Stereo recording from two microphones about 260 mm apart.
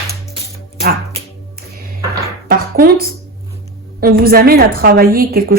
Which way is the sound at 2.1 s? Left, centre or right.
Right.